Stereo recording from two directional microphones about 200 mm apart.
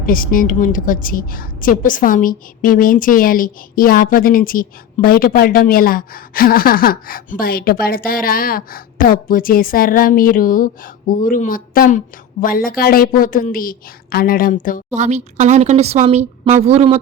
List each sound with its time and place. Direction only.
0.0 s a woman's voice: 45° left (ahead or behind)
14.9 s speech: 35° right (ahead or behind)